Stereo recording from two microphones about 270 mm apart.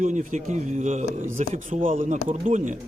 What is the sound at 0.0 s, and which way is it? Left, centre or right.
A man's voice, right.